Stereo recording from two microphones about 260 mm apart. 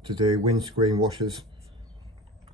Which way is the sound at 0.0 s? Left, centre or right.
Centre.